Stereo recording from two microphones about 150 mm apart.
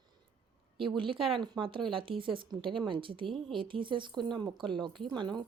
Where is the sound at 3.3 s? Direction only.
5° left (ahead or behind).